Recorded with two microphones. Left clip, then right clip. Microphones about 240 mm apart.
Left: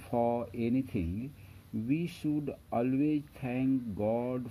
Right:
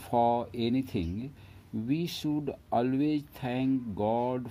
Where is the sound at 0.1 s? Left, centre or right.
Centre.